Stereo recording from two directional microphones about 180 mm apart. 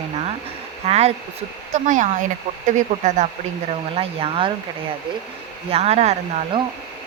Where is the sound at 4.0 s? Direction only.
30° right (ahead or behind).